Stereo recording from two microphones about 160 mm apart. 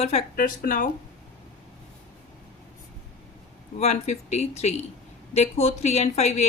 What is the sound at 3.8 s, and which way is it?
A woman's voice, 45° left (ahead or behind).